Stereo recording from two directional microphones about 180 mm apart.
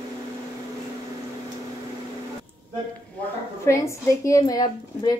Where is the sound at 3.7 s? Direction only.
15° left (ahead or behind).